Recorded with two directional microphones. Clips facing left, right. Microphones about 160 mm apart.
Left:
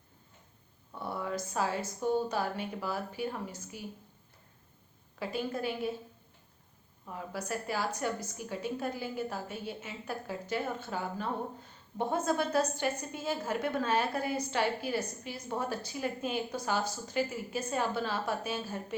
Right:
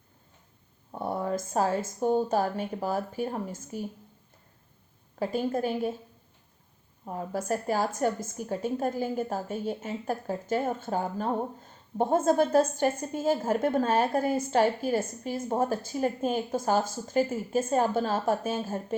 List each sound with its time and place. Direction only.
0.9 s a woman's voice: 45° right (ahead or behind)
5.2 s a woman's voice: 45° right (ahead or behind)
7.0 s a woman's voice: 40° right (ahead or behind)